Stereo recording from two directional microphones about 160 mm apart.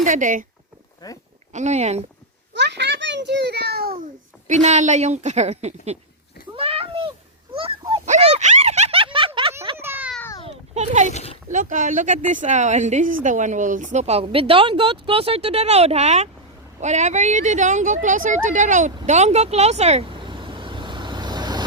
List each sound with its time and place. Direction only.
0.0 s a woman's voice: 55° right (ahead or behind)
1.0 s speech: 25° left (ahead or behind)
1.5 s a woman's voice: 45° right (ahead or behind)
2.5 s a child's voice: 90° right
4.0 s a woman's voice: 50° right (ahead or behind)
6.5 s a sound: 35° right (ahead or behind)
9.7 s a sound: 15° right (ahead or behind)
10.4 s a sound: 45° right (ahead or behind)
11.1 s speech: 40° left (ahead or behind)
11.4 s a woman's voice: 55° right (ahead or behind); by 21.6 s 25° right (ahead or behind)